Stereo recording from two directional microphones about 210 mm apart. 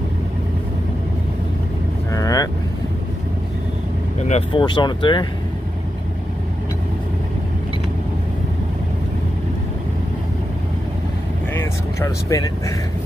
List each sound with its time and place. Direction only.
2.1 s vehicle: 15° left (ahead or behind)
4.3 s speech: 25° left (ahead or behind)
12.0 s speech: 15° left (ahead or behind)